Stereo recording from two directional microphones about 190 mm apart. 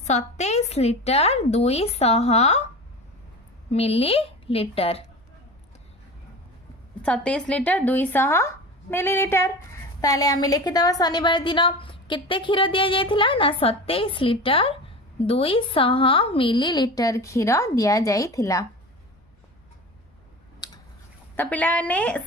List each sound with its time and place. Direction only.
0.0 s a woman's voice: 35° left (ahead or behind)
3.7 s a woman's voice: 30° left (ahead or behind)
7.0 s a woman's voice: 5° left (ahead or behind)
20.6 s a sound: 20° left (ahead or behind)
21.3 s a woman's voice: 10° left (ahead or behind)